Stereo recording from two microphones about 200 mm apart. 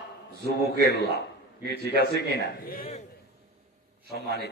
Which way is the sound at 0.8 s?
55° left (ahead or behind).